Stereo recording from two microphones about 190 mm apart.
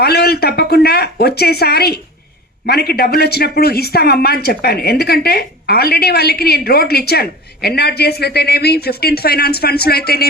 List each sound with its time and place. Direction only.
0.0 s speech: 55° left (ahead or behind)